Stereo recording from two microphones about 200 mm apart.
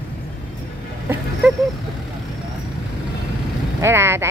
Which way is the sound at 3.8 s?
10° right (ahead or behind).